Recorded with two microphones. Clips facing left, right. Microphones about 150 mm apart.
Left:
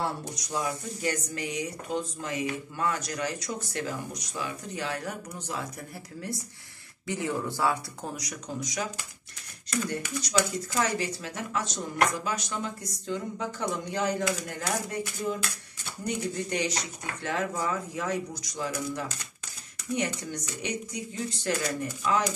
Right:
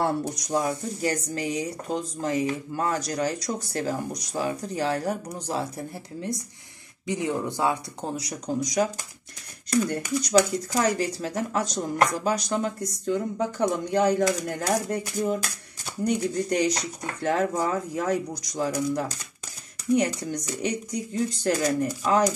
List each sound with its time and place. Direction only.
0.0 s speech: 50° right (ahead or behind); by 5.9 s 35° right (ahead or behind)
7.1 s speech: 20° right (ahead or behind); by 22.3 s 40° right (ahead or behind)